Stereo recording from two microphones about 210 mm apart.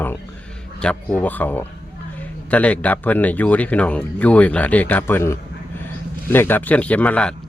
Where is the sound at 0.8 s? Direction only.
5° left (ahead or behind).